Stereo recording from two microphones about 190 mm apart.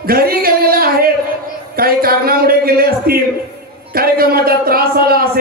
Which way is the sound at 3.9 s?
50° right (ahead or behind).